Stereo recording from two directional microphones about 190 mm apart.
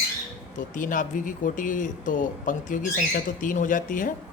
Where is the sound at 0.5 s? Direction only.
45° left (ahead or behind).